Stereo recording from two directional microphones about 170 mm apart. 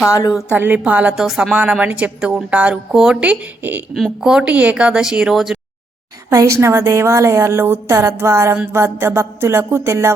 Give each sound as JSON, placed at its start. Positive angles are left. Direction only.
{"t": 0.1, "sound": "a woman's voice", "side_deg": 25}
{"t": 0.5, "sound": "a woman's voice", "side_deg": -10}
{"t": 6.3, "sound": "a woman's voice", "side_deg": -15}